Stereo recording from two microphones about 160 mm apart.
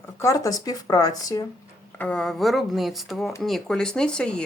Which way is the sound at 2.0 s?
5° left (ahead or behind).